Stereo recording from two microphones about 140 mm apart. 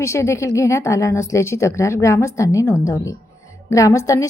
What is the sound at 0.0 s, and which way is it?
A woman's voice, 20° left (ahead or behind).